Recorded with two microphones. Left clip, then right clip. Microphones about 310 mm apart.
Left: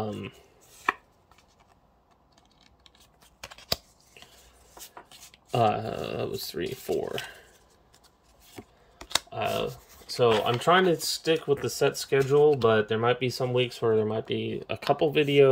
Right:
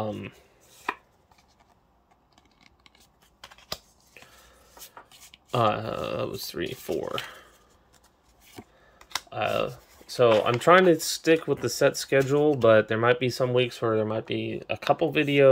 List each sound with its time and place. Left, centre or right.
0.0 s speech: centre
3.4 s scissors: left
5.5 s speech: centre
8.9 s computer keyboard: left
9.3 s speech: centre